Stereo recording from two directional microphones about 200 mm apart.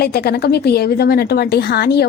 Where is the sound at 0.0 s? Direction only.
50° left (ahead or behind).